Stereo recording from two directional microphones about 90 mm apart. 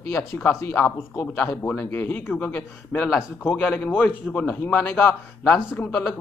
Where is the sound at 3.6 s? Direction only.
10° left (ahead or behind).